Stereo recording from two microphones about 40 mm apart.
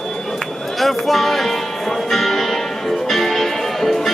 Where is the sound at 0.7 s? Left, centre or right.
Centre.